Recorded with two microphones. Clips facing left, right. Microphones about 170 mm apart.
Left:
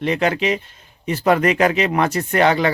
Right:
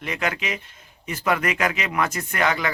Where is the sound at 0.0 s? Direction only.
30° left (ahead or behind).